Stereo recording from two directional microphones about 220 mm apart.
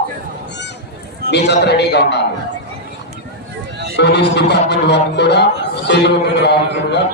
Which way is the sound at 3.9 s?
50° left (ahead or behind).